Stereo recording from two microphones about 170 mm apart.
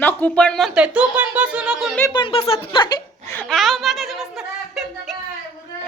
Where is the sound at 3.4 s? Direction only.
Centre (ahead or behind).